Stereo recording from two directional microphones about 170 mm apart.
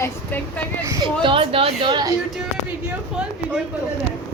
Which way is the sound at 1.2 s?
30° right (ahead or behind).